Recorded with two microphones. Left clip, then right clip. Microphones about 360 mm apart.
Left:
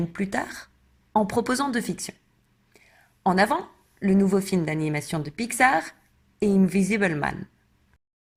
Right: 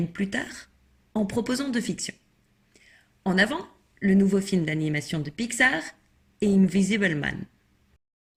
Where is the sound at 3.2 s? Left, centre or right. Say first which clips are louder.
Left 3 dB; centre.